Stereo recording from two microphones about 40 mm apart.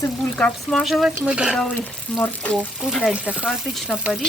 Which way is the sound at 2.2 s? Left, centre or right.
Left.